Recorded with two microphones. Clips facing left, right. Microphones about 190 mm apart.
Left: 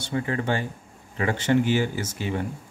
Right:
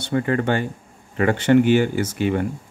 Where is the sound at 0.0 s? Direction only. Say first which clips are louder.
Right 6 dB; 60° right (ahead or behind).